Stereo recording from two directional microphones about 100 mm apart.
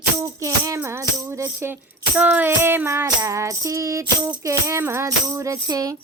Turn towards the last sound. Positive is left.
turn(degrees=-35)  # may be behind; listen again after turning